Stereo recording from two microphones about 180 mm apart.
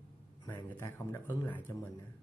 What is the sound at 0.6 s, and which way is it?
Speech, 15° left (ahead or behind).